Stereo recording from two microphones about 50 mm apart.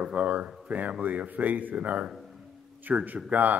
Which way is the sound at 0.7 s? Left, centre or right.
Right.